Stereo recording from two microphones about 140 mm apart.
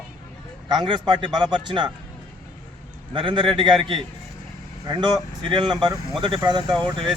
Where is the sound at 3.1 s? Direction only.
35° right (ahead or behind).